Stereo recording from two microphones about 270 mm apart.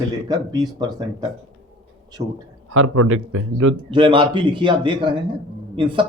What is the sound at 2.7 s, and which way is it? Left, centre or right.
A man's voice, right.